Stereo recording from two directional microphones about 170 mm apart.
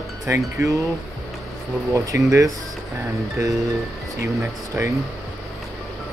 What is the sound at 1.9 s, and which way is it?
Speech, 20° right (ahead or behind).